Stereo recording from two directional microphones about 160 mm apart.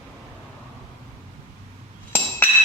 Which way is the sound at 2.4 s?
10° left (ahead or behind).